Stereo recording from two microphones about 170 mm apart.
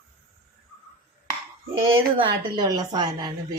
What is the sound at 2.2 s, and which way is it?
A woman's voice, 25° right (ahead or behind).